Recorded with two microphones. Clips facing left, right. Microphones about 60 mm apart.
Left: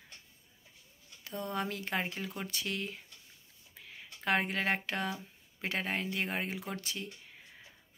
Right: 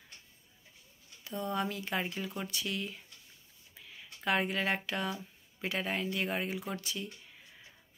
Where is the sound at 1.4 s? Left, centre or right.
Left.